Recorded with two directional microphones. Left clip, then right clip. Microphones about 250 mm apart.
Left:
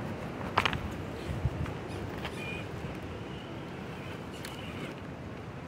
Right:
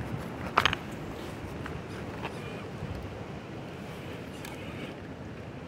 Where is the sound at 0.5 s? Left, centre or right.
Right.